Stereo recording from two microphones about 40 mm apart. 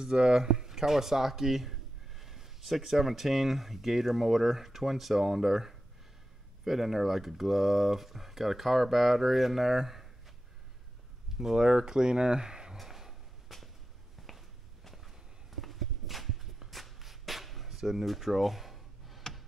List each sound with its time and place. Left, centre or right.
0.0 s speech: centre
11.3 s speech: centre
12.7 s drawer open or close: centre
14.2 s walk: centre
15.6 s a sound: centre